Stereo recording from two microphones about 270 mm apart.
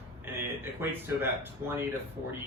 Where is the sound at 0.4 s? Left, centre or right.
Centre.